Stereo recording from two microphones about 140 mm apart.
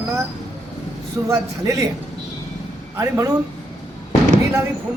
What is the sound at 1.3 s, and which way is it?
Speech, 25° right (ahead or behind).